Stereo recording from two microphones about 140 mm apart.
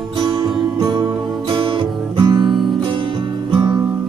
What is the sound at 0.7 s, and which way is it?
Music, 30° right (ahead or behind).